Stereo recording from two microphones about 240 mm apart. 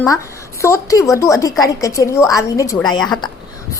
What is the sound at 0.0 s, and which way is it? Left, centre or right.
A woman's voice, centre.